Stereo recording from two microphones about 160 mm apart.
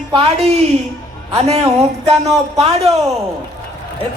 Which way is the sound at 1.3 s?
40° right (ahead or behind).